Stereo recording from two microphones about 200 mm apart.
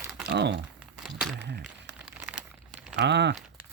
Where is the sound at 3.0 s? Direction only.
60° right (ahead or behind).